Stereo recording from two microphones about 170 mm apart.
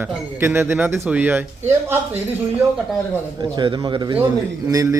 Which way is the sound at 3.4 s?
25° right (ahead or behind).